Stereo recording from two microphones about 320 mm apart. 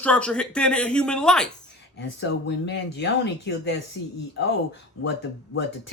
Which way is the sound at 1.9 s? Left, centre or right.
Left.